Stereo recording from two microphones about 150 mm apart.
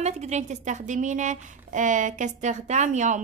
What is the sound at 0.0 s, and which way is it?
A woman's voice, 50° right (ahead or behind).